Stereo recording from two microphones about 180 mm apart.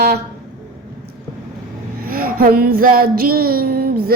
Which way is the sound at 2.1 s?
55° right (ahead or behind).